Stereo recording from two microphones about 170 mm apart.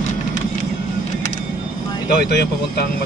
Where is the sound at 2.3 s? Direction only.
75° left (ahead or behind).